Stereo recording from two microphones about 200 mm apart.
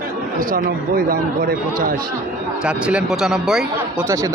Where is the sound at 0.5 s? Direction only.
45° right (ahead or behind).